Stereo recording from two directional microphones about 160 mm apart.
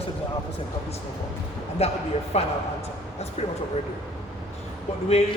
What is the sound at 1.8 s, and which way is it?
Speech, 40° left (ahead or behind).